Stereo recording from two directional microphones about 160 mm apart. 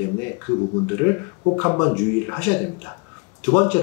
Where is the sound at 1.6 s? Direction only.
25° left (ahead or behind).